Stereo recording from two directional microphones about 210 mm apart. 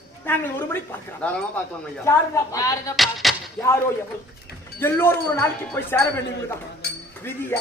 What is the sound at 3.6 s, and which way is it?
Wind chime, 10° left (ahead or behind).